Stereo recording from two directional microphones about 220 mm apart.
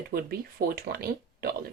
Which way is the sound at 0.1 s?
40° right (ahead or behind).